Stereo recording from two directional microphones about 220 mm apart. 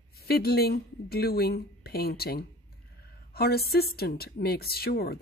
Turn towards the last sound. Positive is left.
turn(degrees=45)  # may be behind; listen again after turning